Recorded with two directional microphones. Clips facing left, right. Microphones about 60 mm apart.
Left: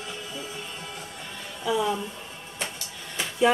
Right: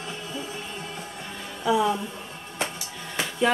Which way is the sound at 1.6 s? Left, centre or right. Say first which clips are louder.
Right 3 dB; centre.